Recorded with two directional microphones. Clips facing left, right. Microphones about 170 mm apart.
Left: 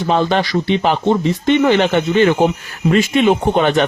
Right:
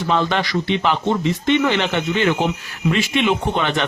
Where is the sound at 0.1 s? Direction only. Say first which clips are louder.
Left 4 dB; 35° left (ahead or behind).